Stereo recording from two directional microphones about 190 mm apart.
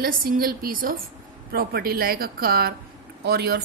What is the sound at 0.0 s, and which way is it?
Speech, 50° right (ahead or behind).